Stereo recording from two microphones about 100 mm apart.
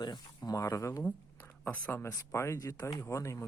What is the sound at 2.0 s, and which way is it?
Speech, 30° left (ahead or behind).